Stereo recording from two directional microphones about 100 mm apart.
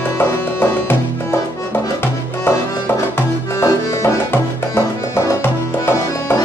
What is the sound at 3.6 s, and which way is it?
Music, 30° left (ahead or behind).